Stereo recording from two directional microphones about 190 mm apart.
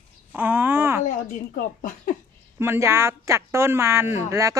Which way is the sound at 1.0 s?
40° left (ahead or behind).